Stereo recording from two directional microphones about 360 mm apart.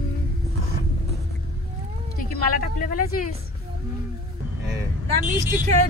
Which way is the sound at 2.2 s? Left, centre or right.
Left.